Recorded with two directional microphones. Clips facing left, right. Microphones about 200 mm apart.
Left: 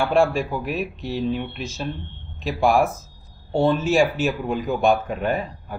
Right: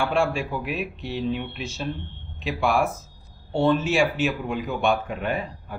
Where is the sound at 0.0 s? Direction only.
40° left (ahead or behind).